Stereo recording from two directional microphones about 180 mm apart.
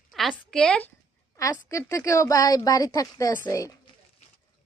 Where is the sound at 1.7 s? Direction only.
15° left (ahead or behind).